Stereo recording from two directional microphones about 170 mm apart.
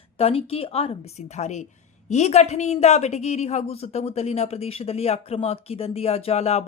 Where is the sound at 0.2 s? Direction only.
35° left (ahead or behind).